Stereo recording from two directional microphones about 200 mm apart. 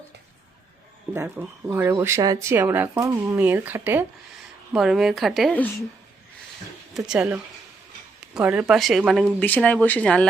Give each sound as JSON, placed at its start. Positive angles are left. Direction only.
{"t": 1.1, "sound": "speech", "side_deg": -15}
{"t": 6.9, "sound": "speech", "side_deg": -5}